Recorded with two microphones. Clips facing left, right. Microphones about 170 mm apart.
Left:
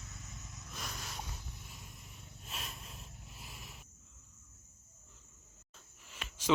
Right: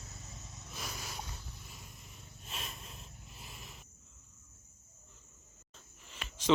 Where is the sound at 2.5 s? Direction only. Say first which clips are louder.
Right 1 dB; centre (ahead or behind).